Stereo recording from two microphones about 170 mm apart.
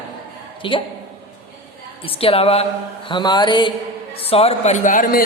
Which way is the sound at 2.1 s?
35° left (ahead or behind).